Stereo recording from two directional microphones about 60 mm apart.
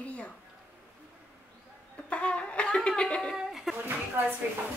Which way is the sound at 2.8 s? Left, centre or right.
Centre.